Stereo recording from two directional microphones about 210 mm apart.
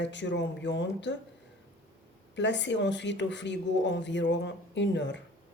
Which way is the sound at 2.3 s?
55° left (ahead or behind).